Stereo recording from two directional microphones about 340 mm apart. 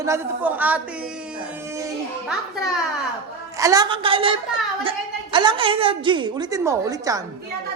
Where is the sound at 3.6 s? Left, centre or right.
Centre.